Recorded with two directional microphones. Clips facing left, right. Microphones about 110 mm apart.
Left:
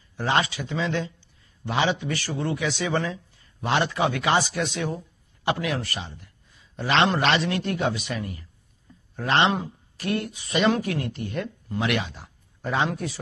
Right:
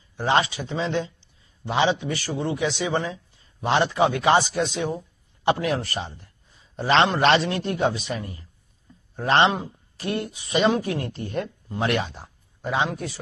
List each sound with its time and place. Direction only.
0.2 s a man's voice: 25° right (ahead or behind)
7.2 s a man's voice: 30° right (ahead or behind)
10.5 s speech: centre (ahead or behind)
10.8 s speech: 30° right (ahead or behind)
12.8 s speech: centre (ahead or behind)